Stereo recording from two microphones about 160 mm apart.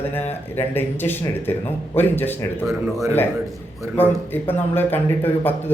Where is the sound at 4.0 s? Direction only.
10° left (ahead or behind).